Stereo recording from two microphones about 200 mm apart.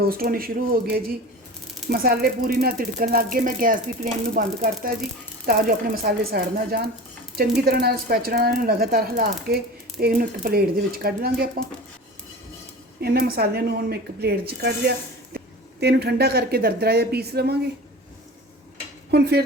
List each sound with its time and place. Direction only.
0.1 s speech: 45° right (ahead or behind)
13.0 s speech: 50° right (ahead or behind)
19.1 s speech: 55° right (ahead or behind)